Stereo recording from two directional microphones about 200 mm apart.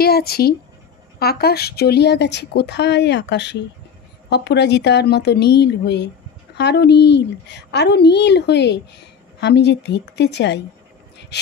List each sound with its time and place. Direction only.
0.0 s a woman's voice: 50° left (ahead or behind)